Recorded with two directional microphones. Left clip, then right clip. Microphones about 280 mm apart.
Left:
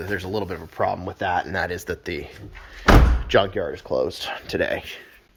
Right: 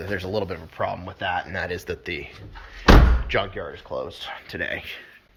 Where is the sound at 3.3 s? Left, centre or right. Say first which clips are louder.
Left 6 dB; left.